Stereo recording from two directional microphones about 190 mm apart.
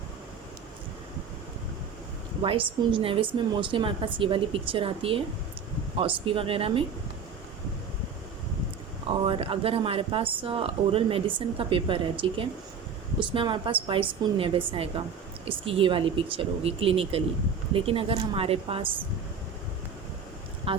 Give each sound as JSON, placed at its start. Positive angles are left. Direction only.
{"t": 2.4, "sound": "speech", "side_deg": -25}
{"t": 9.0, "sound": "speech", "side_deg": -30}
{"t": 20.7, "sound": "speech", "side_deg": -30}